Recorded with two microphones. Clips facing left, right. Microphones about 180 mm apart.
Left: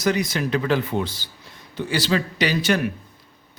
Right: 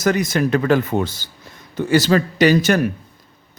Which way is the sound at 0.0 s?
50° right (ahead or behind).